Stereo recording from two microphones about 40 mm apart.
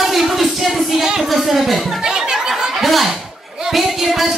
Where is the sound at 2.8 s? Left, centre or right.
Centre.